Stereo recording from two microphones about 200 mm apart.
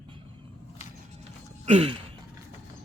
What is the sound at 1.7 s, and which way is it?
Speech, 30° right (ahead or behind).